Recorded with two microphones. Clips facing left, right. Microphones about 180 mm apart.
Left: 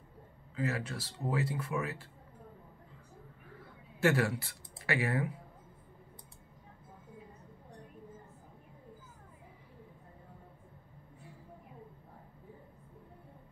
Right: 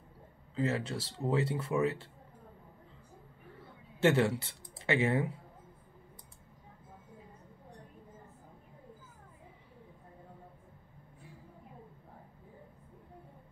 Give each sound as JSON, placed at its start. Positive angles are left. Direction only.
{"t": 0.6, "sound": "speech", "side_deg": -25}
{"t": 4.0, "sound": "speech", "side_deg": -25}